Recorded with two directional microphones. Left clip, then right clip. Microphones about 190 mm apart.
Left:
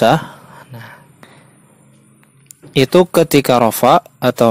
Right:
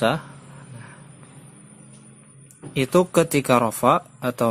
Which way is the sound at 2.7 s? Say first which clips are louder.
Left 8 dB; 45° left (ahead or behind).